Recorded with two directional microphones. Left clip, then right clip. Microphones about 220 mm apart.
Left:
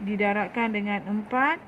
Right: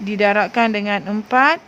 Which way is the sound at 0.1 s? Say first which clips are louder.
Right 10 dB; 45° right (ahead or behind).